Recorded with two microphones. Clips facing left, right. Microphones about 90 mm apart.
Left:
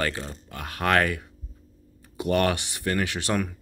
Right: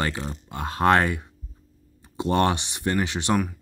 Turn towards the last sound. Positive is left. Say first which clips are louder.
# right 2 dB
turn(degrees=-20)  # may be behind; listen again after turning